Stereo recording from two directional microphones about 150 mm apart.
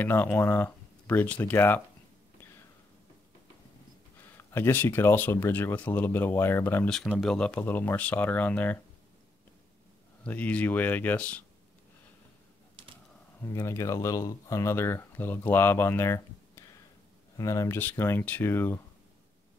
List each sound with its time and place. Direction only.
0.0 s speech: 10° left (ahead or behind)
4.4 s speech: 15° left (ahead or behind)
10.2 s speech: 10° left (ahead or behind)
13.5 s speech: 20° left (ahead or behind)